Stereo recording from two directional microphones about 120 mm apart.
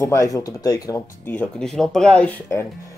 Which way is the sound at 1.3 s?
15° left (ahead or behind).